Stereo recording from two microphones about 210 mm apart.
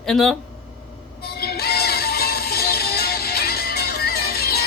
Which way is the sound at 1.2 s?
50° left (ahead or behind).